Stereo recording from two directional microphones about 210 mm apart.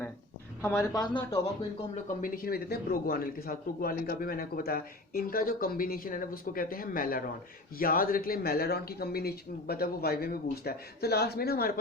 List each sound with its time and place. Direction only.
0.6 s speech: 15° left (ahead or behind)
2.0 s a man's voice: 40° left (ahead or behind)